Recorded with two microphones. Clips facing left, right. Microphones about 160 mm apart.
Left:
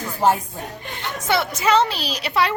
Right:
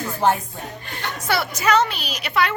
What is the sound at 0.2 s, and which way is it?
Speech, 5° left (ahead or behind).